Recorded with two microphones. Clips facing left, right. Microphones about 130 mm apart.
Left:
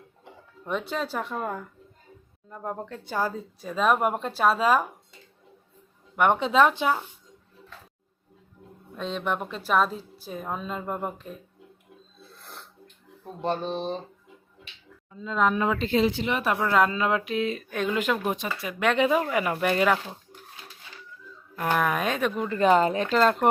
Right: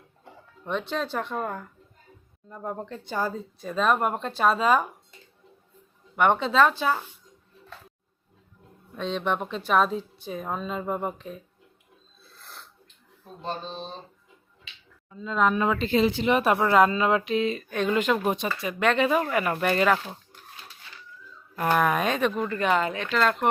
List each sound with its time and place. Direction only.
0.6 s a woman's voice: 5° left (ahead or behind)
6.1 s speech: 10° left (ahead or behind)
9.0 s a woman's voice: 5° left (ahead or behind)
13.4 s speech: 65° left (ahead or behind)
16.3 s speech: 25° right (ahead or behind)
16.6 s a woman's voice: 5° right (ahead or behind)
18.8 s speech: 15° left (ahead or behind)
21.5 s a woman's voice: 5° right (ahead or behind)
22.4 s speech: 20° left (ahead or behind)
22.6 s speech: 35° left (ahead or behind)